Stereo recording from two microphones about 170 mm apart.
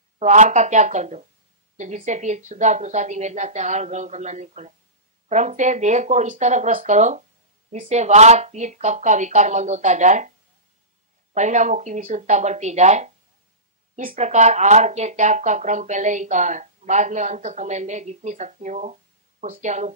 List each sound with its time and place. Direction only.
0.2 s speech: 45° right (ahead or behind)
11.3 s speech: 45° right (ahead or behind)
14.1 s speech: 45° right (ahead or behind)